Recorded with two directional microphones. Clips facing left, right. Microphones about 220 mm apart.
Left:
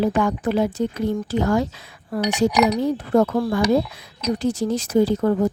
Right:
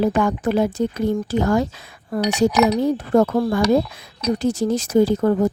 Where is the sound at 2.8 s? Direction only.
45° right (ahead or behind).